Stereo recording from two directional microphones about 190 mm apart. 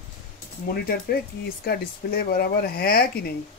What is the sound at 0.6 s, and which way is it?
Speech, 55° left (ahead or behind).